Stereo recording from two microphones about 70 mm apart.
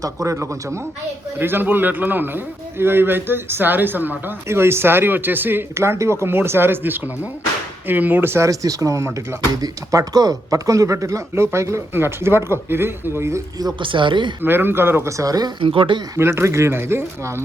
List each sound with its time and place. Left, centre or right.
0.0 s speech: right
1.4 s a man's voice: right
4.4 s speech: right
5.7 s a man's voice: right
8.4 s speech: right
9.6 s speech: right
13.9 s speech: right
14.4 s speech: right
15.2 s speech: right
16.1 s speech: right